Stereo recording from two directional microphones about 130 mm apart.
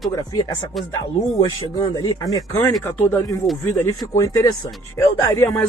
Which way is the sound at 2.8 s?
15° left (ahead or behind).